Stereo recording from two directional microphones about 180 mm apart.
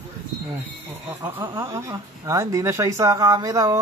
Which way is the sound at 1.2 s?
15° right (ahead or behind).